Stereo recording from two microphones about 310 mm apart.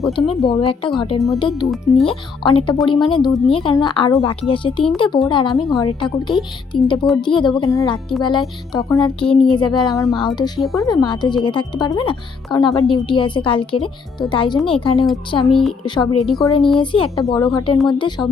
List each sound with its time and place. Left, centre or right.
0.2 s a woman's voice: centre
1.6 s speech: centre
2.0 s a woman's voice: centre
3.2 s speech: centre
3.5 s a woman's voice: centre
6.7 s a woman's voice: centre
9.2 s speech: centre
9.5 s a woman's voice: centre
10.6 s speech: centre
10.8 s a woman's voice: centre
15.4 s speech: centre
15.8 s a woman's voice: centre
16.2 s speech: centre
16.8 s a woman's voice: centre